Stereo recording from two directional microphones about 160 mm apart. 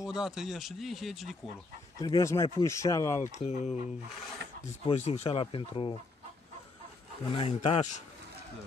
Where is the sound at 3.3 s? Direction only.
45° left (ahead or behind).